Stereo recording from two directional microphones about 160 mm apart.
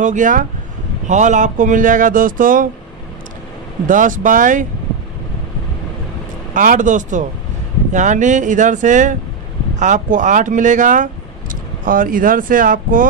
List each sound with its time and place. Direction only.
0.0 s speech: 50° right (ahead or behind)
3.8 s speech: 55° right (ahead or behind)
6.5 s speech: 55° right (ahead or behind)